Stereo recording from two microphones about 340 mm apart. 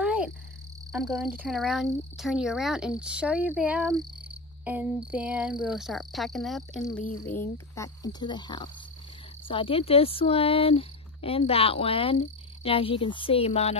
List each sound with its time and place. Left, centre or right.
0.0 s cricket: centre
0.9 s speech: centre